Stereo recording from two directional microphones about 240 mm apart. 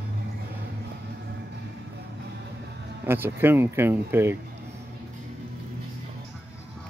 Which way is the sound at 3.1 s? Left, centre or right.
Centre.